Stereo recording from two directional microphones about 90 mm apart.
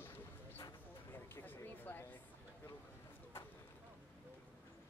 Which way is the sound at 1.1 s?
25° left (ahead or behind).